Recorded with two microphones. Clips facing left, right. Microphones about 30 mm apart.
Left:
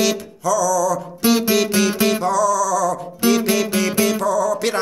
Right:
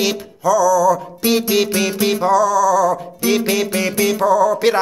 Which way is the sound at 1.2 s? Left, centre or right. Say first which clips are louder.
Left 2 dB; centre.